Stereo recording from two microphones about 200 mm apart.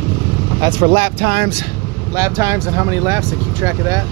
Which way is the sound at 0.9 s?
45° right (ahead or behind).